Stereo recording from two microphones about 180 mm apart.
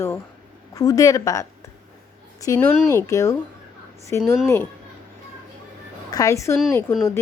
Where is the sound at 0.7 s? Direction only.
20° left (ahead or behind).